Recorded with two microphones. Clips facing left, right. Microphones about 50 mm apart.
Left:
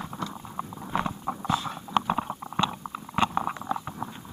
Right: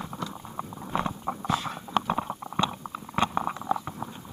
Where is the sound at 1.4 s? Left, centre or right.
Right.